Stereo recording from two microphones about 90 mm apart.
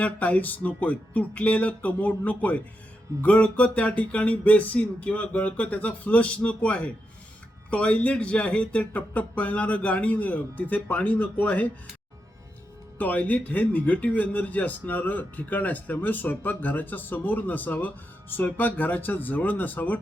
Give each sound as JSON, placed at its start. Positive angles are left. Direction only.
{"t": 0.0, "sound": "speech", "side_deg": 15}
{"t": 13.0, "sound": "speech", "side_deg": 20}